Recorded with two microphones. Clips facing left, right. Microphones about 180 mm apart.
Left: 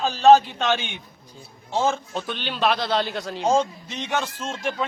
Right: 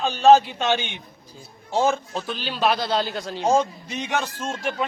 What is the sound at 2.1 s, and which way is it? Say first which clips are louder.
A man's voice: even; centre (ahead or behind).